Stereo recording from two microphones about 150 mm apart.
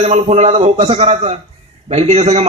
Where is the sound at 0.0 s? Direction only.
50° right (ahead or behind).